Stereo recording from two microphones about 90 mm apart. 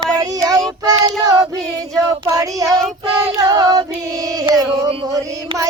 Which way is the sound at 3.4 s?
40° right (ahead or behind).